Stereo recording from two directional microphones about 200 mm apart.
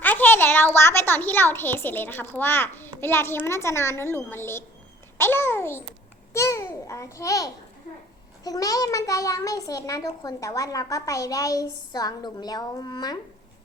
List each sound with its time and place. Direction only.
0.0 s a child's voice: 10° left (ahead or behind)